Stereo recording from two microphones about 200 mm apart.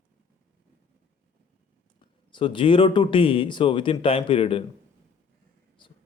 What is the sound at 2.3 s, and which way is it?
Speech, 25° left (ahead or behind).